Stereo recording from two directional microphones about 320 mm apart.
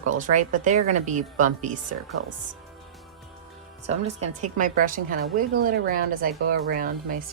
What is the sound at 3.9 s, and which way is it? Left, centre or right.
A woman's voice, right.